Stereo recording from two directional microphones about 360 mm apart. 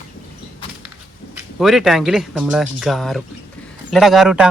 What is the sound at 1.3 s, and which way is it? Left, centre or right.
Speech, centre.